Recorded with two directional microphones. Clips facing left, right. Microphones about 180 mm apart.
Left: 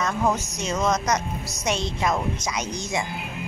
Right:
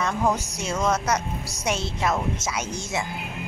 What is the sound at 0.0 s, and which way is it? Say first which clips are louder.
A woman's voice: even; 10° right (ahead or behind).